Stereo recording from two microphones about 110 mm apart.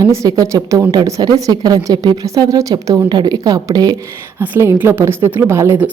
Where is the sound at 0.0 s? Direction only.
30° right (ahead or behind).